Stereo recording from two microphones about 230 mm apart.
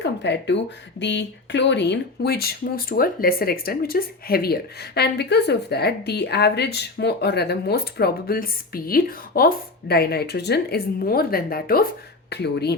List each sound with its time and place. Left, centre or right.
0.0 s a woman's voice: left